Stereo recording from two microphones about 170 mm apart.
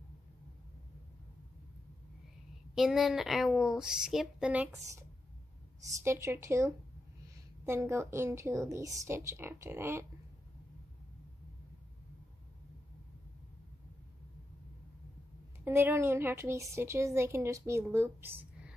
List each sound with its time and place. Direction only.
2.7 s speech: centre (ahead or behind)
6.0 s a woman's voice: 15° right (ahead or behind)
15.6 s a woman's voice: 15° right (ahead or behind)